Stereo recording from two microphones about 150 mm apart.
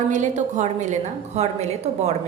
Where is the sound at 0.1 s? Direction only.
55° right (ahead or behind).